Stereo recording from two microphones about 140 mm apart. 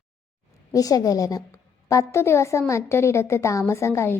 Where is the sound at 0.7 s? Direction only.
25° left (ahead or behind).